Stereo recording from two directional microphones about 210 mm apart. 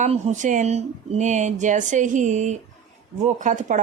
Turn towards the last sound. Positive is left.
turn(degrees=-35)  # may be behind; listen again after turning